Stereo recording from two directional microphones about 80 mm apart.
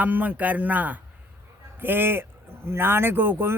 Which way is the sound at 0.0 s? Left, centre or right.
Right.